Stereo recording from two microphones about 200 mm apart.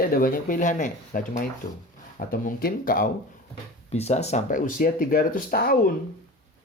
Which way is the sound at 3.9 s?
35° left (ahead or behind).